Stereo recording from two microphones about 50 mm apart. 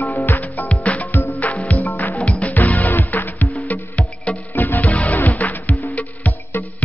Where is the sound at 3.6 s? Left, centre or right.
Left.